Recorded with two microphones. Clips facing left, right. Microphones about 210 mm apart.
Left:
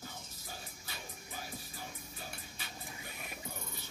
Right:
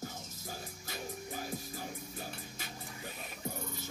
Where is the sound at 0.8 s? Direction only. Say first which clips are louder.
Right 8 dB; 45° right (ahead or behind).